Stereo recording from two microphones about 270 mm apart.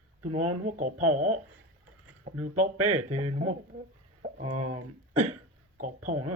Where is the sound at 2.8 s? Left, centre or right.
Right.